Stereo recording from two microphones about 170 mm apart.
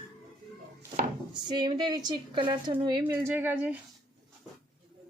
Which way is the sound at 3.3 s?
10° right (ahead or behind).